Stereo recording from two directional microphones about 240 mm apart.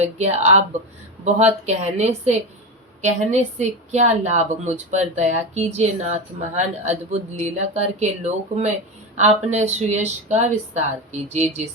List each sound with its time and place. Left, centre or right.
0.0 s speech: right